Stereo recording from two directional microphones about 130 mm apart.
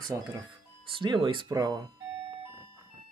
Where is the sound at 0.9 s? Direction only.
40° right (ahead or behind).